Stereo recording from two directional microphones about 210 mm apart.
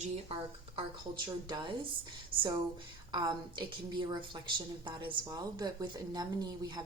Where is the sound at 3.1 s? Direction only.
20° right (ahead or behind).